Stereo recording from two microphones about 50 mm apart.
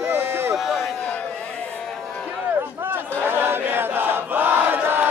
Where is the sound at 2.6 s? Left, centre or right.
Right.